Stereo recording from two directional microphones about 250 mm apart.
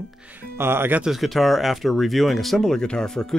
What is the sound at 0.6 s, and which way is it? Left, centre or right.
Speech, centre.